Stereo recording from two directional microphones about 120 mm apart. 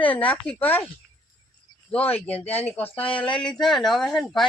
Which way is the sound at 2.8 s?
15° left (ahead or behind).